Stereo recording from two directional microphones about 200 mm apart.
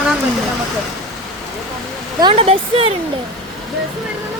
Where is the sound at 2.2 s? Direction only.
25° right (ahead or behind).